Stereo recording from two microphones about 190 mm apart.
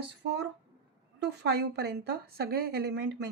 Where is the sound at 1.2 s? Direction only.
60° right (ahead or behind).